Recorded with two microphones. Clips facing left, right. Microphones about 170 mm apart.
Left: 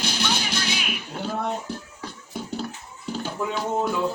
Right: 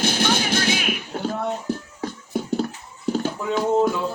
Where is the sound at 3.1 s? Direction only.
45° right (ahead or behind).